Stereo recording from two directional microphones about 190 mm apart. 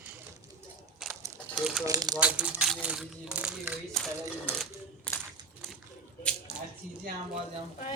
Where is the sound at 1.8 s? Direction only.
20° right (ahead or behind).